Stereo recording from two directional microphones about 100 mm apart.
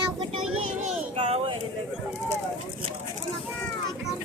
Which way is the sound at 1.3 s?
80° right.